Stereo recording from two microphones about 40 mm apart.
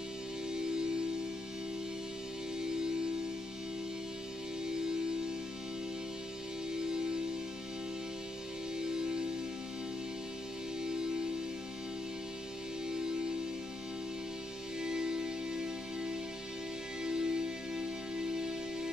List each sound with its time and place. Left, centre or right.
0.5 s music: centre
2.6 s music: centre
6.7 s music: centre
8.7 s music: centre
10.8 s music: centre
12.8 s music: centre
14.8 s music: centre